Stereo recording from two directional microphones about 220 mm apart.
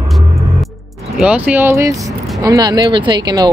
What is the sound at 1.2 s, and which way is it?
Speech, 5° right (ahead or behind).